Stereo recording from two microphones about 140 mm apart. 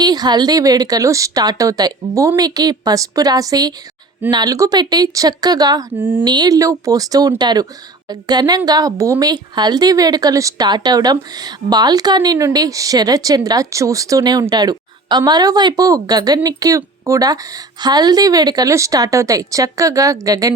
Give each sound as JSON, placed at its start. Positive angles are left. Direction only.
{"t": 0.0, "sound": "a woman's voice", "side_deg": -30}
{"t": 6.0, "sound": "speech", "side_deg": -15}
{"t": 6.2, "sound": "a woman's voice", "side_deg": -30}